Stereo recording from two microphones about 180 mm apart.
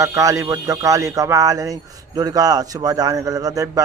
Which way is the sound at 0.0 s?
20° right (ahead or behind).